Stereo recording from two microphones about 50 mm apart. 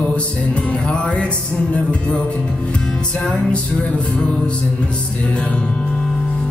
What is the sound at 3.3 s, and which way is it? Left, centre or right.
Music, left.